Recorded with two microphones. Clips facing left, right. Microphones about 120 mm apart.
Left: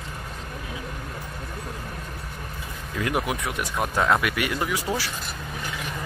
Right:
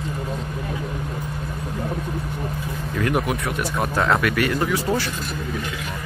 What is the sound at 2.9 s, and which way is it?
Speech, 15° left (ahead or behind).